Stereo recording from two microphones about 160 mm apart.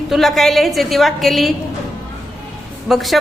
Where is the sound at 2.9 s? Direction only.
Centre (ahead or behind).